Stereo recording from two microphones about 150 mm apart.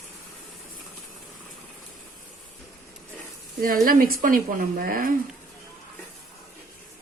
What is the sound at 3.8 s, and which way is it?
Speech, 75° right (ahead or behind).